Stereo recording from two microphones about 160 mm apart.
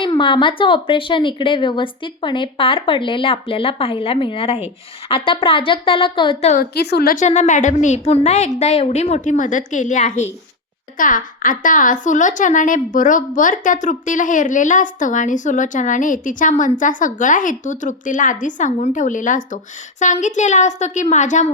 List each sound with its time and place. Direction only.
0.0 s speech: 30° left (ahead or behind)
6.5 s a woman's voice: 75° left (ahead or behind)
7.2 s a woman's voice: 50° left (ahead or behind)